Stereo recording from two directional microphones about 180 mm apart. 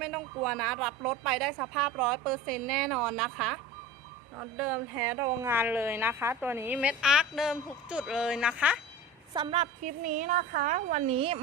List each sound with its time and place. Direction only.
0.0 s a woman's voice: centre (ahead or behind)
9.3 s a woman's voice: 30° right (ahead or behind)
9.8 s a woman's voice: 50° right (ahead or behind)